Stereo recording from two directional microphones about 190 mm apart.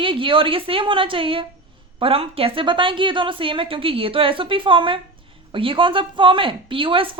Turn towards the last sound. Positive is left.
turn(degrees=-25)  # may be behind; listen again after turning